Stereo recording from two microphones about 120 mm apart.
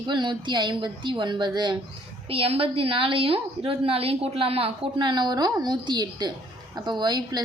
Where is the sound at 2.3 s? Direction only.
50° right (ahead or behind).